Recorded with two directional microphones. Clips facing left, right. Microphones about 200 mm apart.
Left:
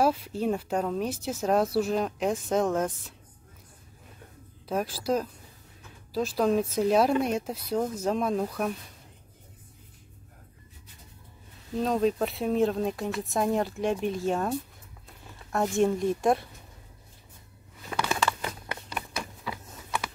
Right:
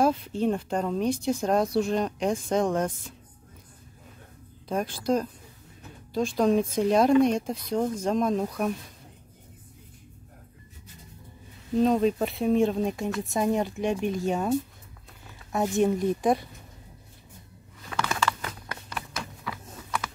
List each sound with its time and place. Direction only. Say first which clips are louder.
0.0 s speech: right 2 dB; 10° left (ahead or behind)
4.6 s speech: right 1 dB; 5° left (ahead or behind)
11.7 s speech: right 3 dB; centre (ahead or behind)
17.8 s crumpling: even; 20° left (ahead or behind)
19.1 s a sound: even; 20° left (ahead or behind)